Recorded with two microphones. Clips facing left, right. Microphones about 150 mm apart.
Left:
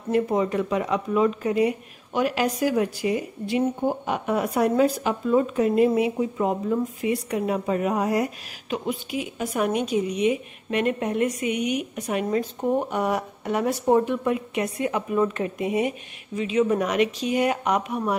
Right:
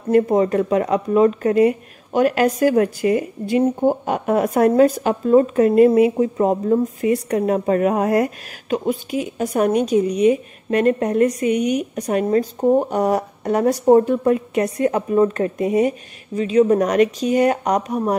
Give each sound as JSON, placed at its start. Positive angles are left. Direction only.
{"t": 0.1, "sound": "speech", "side_deg": -50}